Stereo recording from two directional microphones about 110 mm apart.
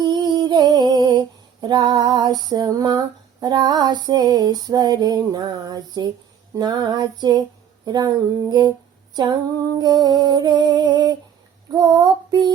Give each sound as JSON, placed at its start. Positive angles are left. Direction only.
{"t": 0.0, "sound": "music", "side_deg": -40}
{"t": 1.6, "sound": "female singing", "side_deg": -40}